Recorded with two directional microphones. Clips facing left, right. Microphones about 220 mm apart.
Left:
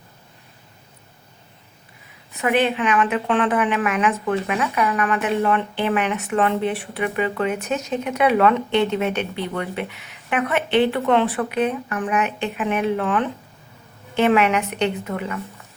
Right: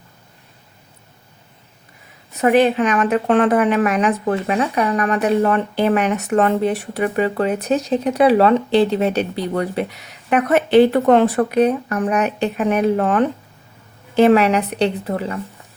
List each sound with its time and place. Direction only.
2.4 s a woman's voice: 40° right (ahead or behind)